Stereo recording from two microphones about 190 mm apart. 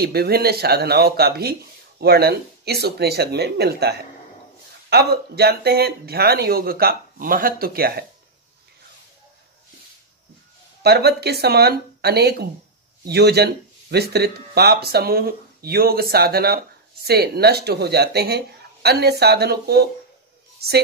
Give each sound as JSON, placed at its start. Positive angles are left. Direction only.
{"t": 0.0, "sound": "speech", "side_deg": -55}
{"t": 10.8, "sound": "speech", "side_deg": -55}